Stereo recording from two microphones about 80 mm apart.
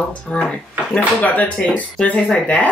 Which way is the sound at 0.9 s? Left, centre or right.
Centre.